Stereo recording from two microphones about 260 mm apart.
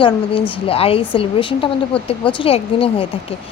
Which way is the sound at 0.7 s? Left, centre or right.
Left.